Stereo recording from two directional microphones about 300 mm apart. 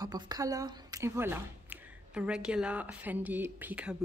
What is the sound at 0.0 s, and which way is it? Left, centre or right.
A woman's voice, centre.